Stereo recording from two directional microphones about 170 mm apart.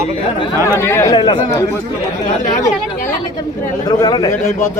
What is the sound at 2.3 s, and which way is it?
Speech, 40° left (ahead or behind).